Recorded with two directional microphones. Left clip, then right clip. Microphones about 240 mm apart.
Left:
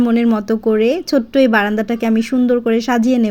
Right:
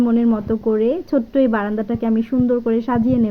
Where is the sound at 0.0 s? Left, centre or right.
Left.